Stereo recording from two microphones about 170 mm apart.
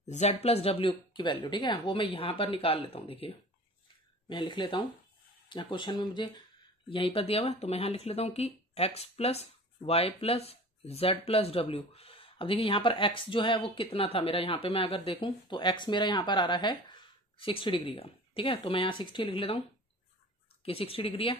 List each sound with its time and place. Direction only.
0.0 s speech: 40° left (ahead or behind)
20.6 s speech: 35° left (ahead or behind)